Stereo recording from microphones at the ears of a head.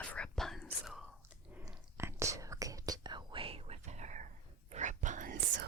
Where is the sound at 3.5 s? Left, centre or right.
Right.